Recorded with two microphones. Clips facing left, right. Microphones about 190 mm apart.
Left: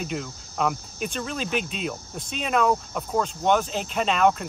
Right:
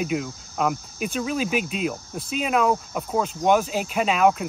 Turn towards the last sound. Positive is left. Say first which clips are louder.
# right 2 dB
turn(degrees=-5)  # may be behind; listen again after turning